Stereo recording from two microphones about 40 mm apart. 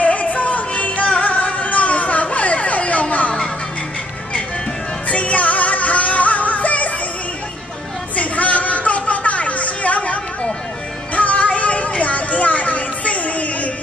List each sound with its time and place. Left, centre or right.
0.0 s music: left
5.1 s music: left
8.2 s a sound: left
11.1 s music: left